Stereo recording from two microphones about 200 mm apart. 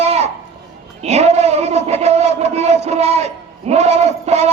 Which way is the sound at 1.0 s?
30° right (ahead or behind).